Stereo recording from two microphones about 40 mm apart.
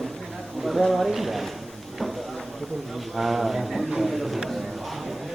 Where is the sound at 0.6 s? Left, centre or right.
Centre.